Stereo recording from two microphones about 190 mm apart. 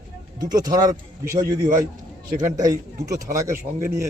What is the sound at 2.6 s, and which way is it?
A man's voice, 15° right (ahead or behind).